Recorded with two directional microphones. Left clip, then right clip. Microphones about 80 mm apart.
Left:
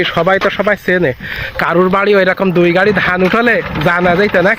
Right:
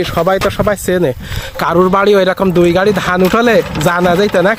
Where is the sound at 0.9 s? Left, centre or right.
Right.